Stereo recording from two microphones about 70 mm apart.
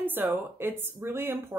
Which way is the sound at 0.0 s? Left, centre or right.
Right.